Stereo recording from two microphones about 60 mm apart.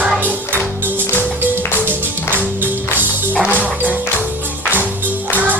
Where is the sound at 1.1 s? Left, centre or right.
Right.